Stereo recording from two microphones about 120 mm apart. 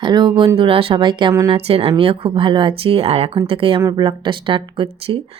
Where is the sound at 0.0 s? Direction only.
40° right (ahead or behind).